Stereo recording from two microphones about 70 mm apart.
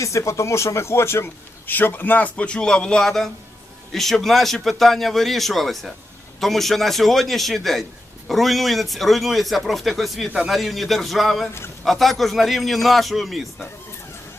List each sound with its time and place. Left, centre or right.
0.0 s a man's voice: left; by 13.5 s centre